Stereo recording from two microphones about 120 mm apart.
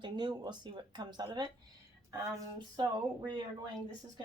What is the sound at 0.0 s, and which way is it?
Speech, 40° right (ahead or behind).